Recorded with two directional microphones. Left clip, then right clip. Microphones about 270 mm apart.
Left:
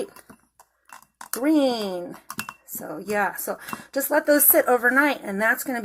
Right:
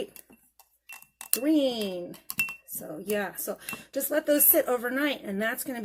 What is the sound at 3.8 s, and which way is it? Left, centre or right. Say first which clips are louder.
Speech: left 6 dB; centre.